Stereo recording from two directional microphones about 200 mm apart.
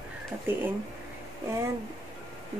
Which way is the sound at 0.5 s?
10° right (ahead or behind).